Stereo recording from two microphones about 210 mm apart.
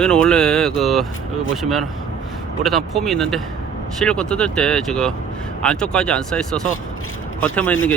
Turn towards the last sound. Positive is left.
turn(degrees=5)  # may be behind; listen again after turning